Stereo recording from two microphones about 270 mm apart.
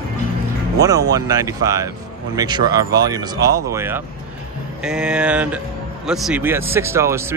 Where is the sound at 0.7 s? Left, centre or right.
Centre.